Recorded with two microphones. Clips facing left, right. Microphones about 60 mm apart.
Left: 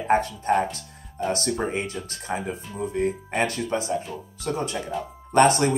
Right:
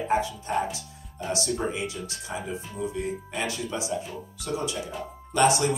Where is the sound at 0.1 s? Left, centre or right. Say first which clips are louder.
Left 6 dB; left.